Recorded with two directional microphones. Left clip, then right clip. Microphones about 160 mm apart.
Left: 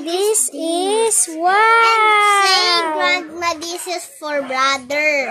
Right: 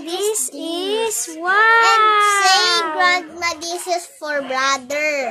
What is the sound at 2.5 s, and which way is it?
A child's voice, 50° right (ahead or behind).